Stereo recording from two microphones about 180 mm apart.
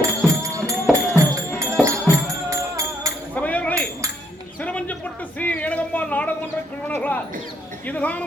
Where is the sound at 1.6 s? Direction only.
15° right (ahead or behind).